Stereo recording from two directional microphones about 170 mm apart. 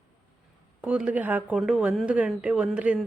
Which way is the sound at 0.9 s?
5° right (ahead or behind).